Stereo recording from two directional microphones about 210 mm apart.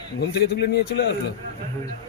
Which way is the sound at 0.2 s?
50° left (ahead or behind).